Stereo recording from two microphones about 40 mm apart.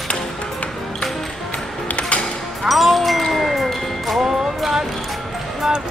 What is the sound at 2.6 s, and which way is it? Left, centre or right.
Music, centre.